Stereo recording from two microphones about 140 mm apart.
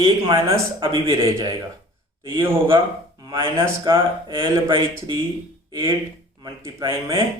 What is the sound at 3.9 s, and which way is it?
Speech, 35° right (ahead or behind).